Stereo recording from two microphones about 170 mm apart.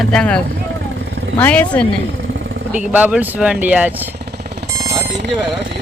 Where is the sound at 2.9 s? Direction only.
10° right (ahead or behind).